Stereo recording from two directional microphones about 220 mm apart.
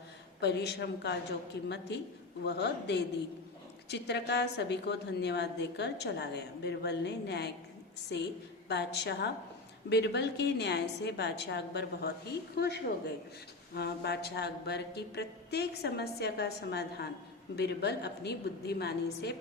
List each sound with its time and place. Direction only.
0.3 s a woman's voice: 50° left (ahead or behind)